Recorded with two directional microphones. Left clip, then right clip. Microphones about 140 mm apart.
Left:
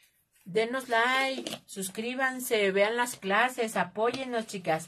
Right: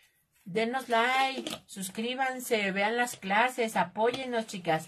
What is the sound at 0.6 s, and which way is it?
A woman's voice, 40° left (ahead or behind).